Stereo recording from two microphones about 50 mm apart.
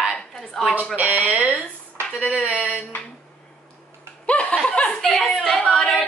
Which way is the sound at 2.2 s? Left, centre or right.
Centre.